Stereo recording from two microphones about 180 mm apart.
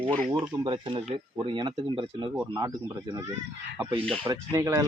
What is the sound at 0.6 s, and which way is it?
A man's voice, 30° right (ahead or behind).